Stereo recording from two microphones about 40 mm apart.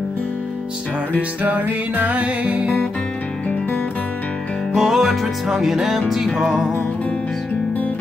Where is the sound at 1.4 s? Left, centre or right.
Right.